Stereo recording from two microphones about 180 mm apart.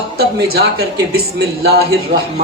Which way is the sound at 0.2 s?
60° right (ahead or behind).